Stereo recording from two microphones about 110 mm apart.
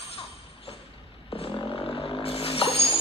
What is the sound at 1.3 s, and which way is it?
Vehicle, 60° left (ahead or behind).